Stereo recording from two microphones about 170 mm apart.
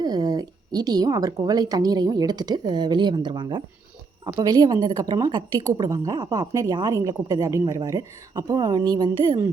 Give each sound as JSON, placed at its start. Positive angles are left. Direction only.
{"t": 0.0, "sound": "a woman's voice", "side_deg": -25}